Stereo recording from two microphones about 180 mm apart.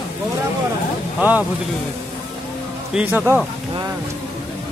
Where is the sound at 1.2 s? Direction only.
10° right (ahead or behind).